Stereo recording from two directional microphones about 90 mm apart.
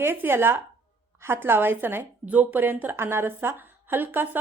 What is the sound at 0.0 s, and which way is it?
Speech, 25° right (ahead or behind).